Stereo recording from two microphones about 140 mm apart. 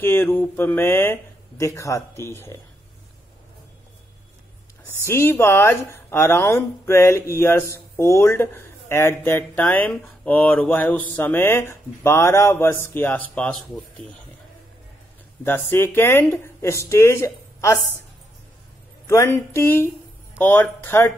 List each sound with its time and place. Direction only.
0.0 s speech: 15° left (ahead or behind)
4.8 s speech: 20° left (ahead or behind)
15.4 s speech: 15° left (ahead or behind)
19.0 s a sound: 20° left (ahead or behind)
20.3 s speech: 15° left (ahead or behind)